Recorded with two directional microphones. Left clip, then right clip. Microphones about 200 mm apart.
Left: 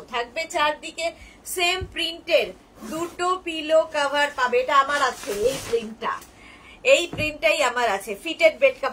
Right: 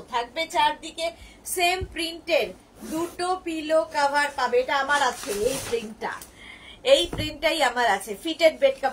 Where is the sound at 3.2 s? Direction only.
15° left (ahead or behind).